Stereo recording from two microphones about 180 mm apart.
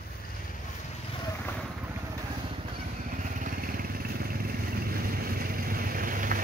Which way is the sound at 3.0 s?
45° right (ahead or behind).